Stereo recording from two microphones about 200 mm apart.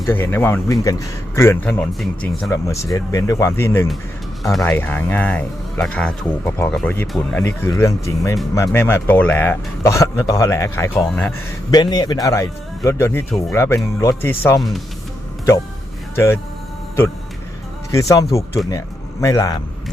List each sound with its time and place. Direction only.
0.0 s speech: 10° left (ahead or behind)
2.5 s speech: 15° left (ahead or behind)
11.7 s speech: 20° left (ahead or behind)
16.1 s speech: 15° left (ahead or behind)
17.9 s speech: 15° left (ahead or behind)